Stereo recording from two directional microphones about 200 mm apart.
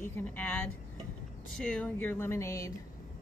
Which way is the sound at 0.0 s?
10° left (ahead or behind).